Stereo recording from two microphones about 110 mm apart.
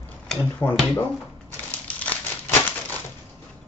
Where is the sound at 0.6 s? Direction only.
20° left (ahead or behind).